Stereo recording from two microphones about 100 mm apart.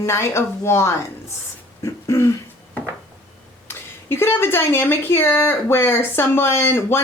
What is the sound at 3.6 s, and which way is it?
Speech, 25° left (ahead or behind).